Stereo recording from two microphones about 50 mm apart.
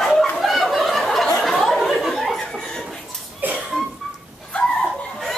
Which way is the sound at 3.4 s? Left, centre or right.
Right.